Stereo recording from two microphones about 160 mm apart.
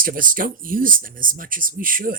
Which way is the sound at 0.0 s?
60° right (ahead or behind).